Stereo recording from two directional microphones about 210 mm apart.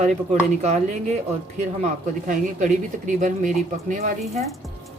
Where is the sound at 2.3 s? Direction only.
35° right (ahead or behind).